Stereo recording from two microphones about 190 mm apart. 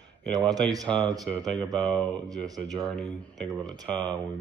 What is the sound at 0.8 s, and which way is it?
Speech, 5° left (ahead or behind).